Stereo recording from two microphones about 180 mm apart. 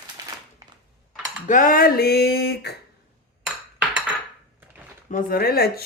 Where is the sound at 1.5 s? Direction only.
50° left (ahead or behind); by 2.7 s 65° left (ahead or behind).